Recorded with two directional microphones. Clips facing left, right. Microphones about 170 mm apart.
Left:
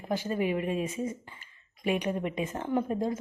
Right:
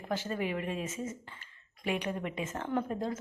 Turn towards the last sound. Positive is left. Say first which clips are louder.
# left 4 dB
turn(degrees=15)  # may be behind; listen again after turning